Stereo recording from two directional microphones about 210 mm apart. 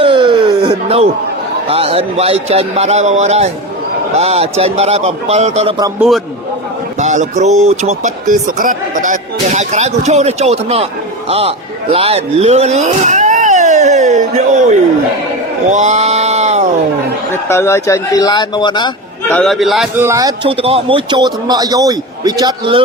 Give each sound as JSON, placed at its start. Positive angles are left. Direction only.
{"t": 0.0, "sound": "a sound", "side_deg": -25}
{"t": 1.6, "sound": "speech", "side_deg": -25}
{"t": 6.0, "sound": "a man's voice", "side_deg": 0}
{"t": 7.0, "sound": "a man's voice", "side_deg": -35}
{"t": 15.7, "sound": "a sound", "side_deg": -35}
{"t": 17.3, "sound": "speech", "side_deg": 10}
{"t": 19.3, "sound": "a man's voice", "side_deg": 0}
{"t": 20.1, "sound": "speech", "side_deg": -15}